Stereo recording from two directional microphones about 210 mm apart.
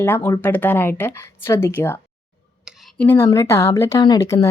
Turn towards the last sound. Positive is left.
turn(degrees=15)  # may be behind; listen again after turning